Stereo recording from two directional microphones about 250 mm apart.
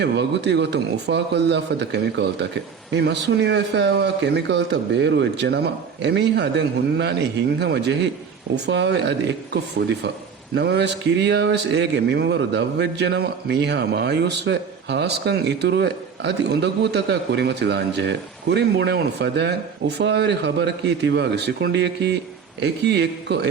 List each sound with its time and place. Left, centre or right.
0.0 s speech: right